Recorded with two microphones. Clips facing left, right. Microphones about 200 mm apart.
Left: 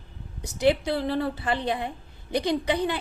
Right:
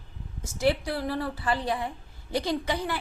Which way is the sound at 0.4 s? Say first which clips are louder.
Left 3 dB; 20° left (ahead or behind).